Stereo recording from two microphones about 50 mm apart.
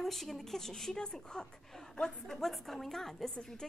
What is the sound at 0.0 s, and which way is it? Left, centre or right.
A woman's voice, centre.